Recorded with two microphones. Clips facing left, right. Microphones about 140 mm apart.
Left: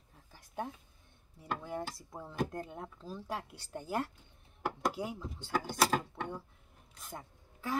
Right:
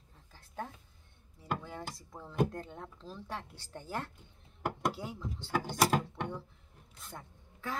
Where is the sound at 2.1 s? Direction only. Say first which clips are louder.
Right 4 dB; 15° left (ahead or behind).